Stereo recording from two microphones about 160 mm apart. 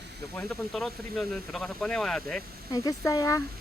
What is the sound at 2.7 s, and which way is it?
Speech, 25° left (ahead or behind).